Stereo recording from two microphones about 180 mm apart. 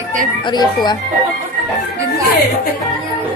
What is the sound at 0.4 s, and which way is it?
Speech, 25° left (ahead or behind).